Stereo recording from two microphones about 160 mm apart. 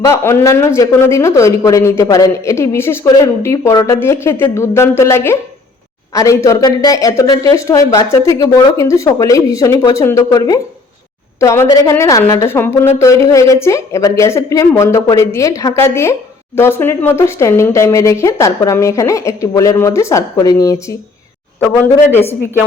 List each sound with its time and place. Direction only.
0.1 s speech: 15° left (ahead or behind)